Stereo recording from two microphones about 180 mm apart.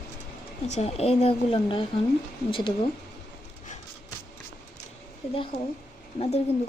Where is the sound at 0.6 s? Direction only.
35° left (ahead or behind).